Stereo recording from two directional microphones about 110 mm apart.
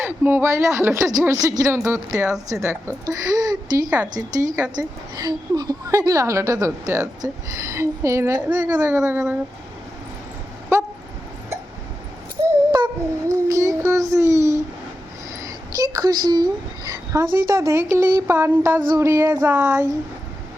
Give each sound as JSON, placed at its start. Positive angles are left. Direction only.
{"t": 0.0, "sound": "a woman's voice", "side_deg": -20}
{"t": 8.4, "sound": "a woman's voice", "side_deg": -10}
{"t": 8.9, "sound": "a woman's voice", "side_deg": -25}
{"t": 10.7, "sound": "a woman's voice", "side_deg": -25}
{"t": 12.7, "sound": "a sound", "side_deg": -35}
{"t": 13.8, "sound": "a woman's voice", "side_deg": -30}